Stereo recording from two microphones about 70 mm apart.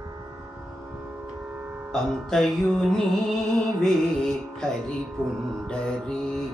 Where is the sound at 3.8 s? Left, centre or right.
Centre.